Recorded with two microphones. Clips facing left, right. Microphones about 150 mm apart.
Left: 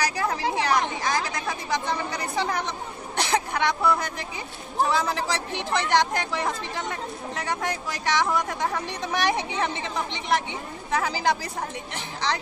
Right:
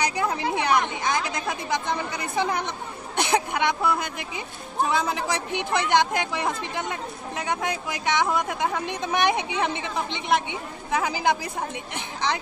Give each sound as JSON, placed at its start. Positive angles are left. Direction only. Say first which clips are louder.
{"t": 0.0, "sound": "a woman's voice", "louder": "right 1 dB", "side_deg": -20}